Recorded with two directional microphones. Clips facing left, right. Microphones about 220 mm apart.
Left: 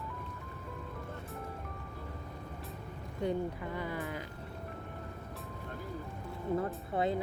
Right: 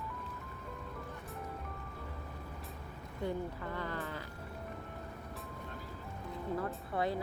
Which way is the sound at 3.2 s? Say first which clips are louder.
Left 4 dB; 15° left (ahead or behind).